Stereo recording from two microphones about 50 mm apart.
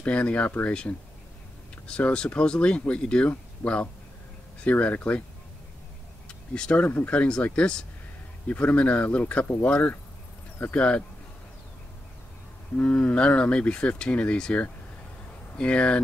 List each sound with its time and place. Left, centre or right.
0.0 s speech: left
1.9 s speech: left
6.2 s a sound: centre
7.1 s speech: left
12.7 s speech: left